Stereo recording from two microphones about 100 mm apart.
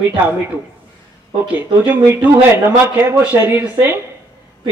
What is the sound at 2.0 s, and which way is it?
Speech, 20° right (ahead or behind).